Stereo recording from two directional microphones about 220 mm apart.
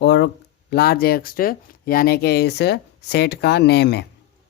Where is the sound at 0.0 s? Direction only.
50° left (ahead or behind).